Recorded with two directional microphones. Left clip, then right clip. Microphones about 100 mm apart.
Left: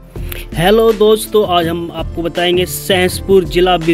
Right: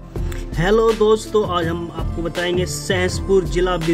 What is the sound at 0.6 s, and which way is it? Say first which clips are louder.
Speech: left 6 dB; 25° left (ahead or behind).